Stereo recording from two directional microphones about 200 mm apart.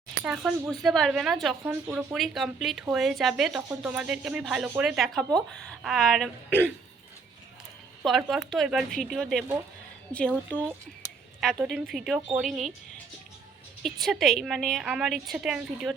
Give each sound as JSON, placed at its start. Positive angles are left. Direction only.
{"t": 0.3, "sound": "speech", "side_deg": 0}
{"t": 8.0, "sound": "a woman's voice", "side_deg": 0}
{"t": 11.6, "sound": "speech", "side_deg": 0}
{"t": 13.8, "sound": "speech", "side_deg": 0}